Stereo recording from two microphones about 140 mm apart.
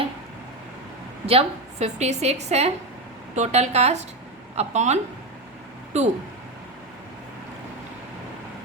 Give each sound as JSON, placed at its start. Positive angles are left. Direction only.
{"t": 1.3, "sound": "a woman's voice", "side_deg": -50}